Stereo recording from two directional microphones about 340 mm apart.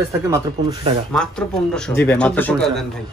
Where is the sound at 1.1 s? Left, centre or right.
Centre.